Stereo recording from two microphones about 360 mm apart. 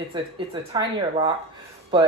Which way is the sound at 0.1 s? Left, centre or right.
Centre.